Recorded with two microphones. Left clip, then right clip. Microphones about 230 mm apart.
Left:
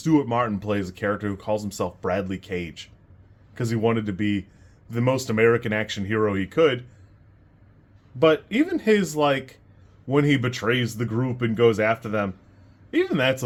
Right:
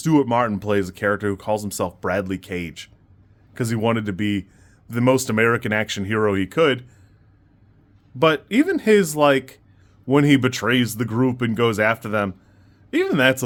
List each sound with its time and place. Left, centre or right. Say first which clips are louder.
0.0 s speech: right 3 dB; right
8.2 s speech: right 2 dB; right